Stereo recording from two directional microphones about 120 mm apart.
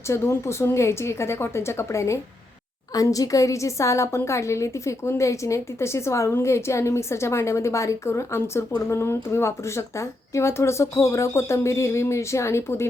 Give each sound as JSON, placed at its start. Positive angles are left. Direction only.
{"t": 0.1, "sound": "a woman's voice", "side_deg": 20}